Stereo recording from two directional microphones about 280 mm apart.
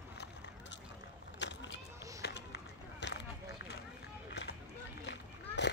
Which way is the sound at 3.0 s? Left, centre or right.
Left.